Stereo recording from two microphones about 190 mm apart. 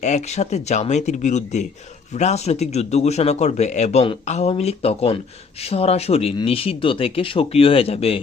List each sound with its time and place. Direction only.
0.0 s speech: 35° left (ahead or behind)